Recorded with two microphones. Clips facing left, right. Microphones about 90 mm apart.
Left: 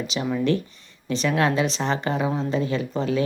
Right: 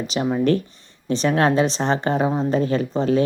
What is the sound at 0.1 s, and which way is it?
Speech, 40° right (ahead or behind).